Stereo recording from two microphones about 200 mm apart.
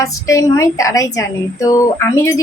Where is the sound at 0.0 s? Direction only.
15° left (ahead or behind).